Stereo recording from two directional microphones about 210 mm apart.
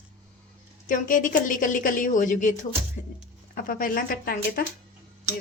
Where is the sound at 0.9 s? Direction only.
40° left (ahead or behind).